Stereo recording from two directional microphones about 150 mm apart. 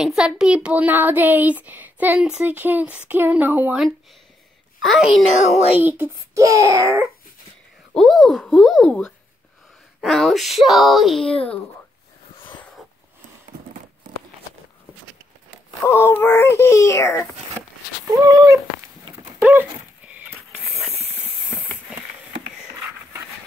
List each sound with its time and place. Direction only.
0.0 s speech: 5° right (ahead or behind)
4.8 s speech: centre (ahead or behind)
5.8 s a child's voice: 15° right (ahead or behind)
7.9 s speech: centre (ahead or behind)
15.8 s speech: 15° left (ahead or behind)
18.2 s a child's voice: 20° right (ahead or behind)